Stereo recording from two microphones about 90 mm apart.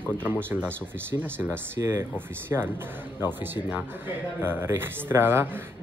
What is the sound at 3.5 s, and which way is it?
Speech, 20° right (ahead or behind).